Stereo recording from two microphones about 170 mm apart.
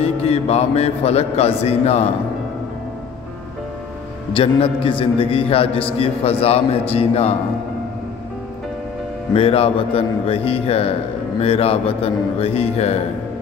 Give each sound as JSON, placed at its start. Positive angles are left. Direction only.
{"t": 0.0, "sound": "a man's voice", "side_deg": 35}
{"t": 4.3, "sound": "a man's voice", "side_deg": 30}
{"t": 9.3, "sound": "a man's voice", "side_deg": 35}